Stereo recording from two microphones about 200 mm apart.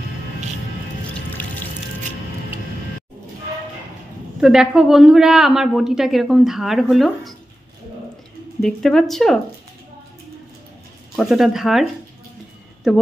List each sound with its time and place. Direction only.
1.4 s music: 10° left (ahead or behind)
4.4 s a woman's voice: 5° right (ahead or behind)
8.5 s a woman's voice: centre (ahead or behind)
11.1 s a woman's voice: centre (ahead or behind)